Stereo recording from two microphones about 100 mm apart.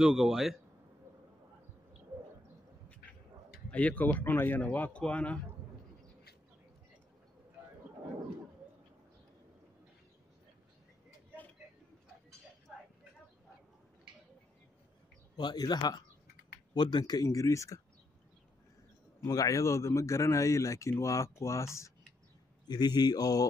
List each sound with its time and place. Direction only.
0.0 s a man's voice: 5° right (ahead or behind)
3.7 s speech: 15° left (ahead or behind)
12.7 s a sound: centre (ahead or behind)
15.3 s a man's voice: 45° left (ahead or behind)
19.2 s speech: 35° left (ahead or behind)
22.7 s a man's voice: 45° left (ahead or behind)